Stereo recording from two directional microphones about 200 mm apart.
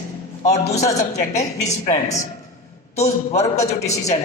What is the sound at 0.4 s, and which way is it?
A woman's voice, 35° left (ahead or behind).